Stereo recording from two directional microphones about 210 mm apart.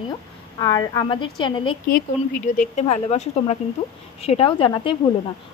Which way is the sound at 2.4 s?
35° left (ahead or behind).